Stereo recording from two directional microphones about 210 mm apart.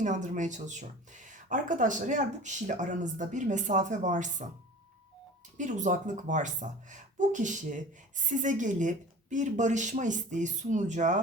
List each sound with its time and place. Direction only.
0.0 s speech: 35° right (ahead or behind)
5.5 s speech: 35° right (ahead or behind)